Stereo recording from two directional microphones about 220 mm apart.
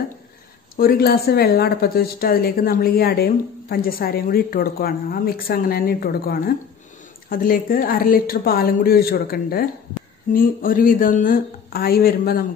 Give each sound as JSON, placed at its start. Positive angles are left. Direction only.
{"t": 0.7, "sound": "a woman's voice", "side_deg": 45}